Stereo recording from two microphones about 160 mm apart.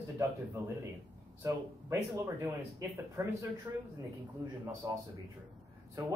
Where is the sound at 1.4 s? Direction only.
20° right (ahead or behind).